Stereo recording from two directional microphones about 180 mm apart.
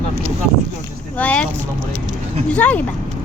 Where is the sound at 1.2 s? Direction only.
5° left (ahead or behind).